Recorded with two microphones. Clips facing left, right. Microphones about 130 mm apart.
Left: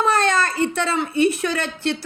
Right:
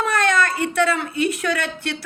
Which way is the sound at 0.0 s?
25° left (ahead or behind).